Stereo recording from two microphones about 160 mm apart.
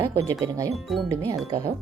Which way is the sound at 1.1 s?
20° right (ahead or behind).